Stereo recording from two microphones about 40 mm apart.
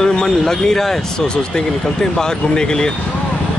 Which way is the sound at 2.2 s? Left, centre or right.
Centre.